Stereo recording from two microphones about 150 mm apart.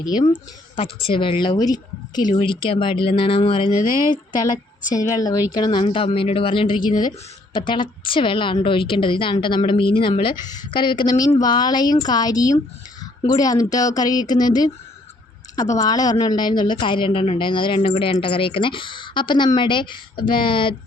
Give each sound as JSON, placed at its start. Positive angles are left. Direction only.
{"t": 0.0, "sound": "speech", "side_deg": 25}
{"t": 4.4, "sound": "a woman's voice", "side_deg": 60}
{"t": 4.9, "sound": "speech", "side_deg": 25}
{"t": 15.7, "sound": "speech", "side_deg": 25}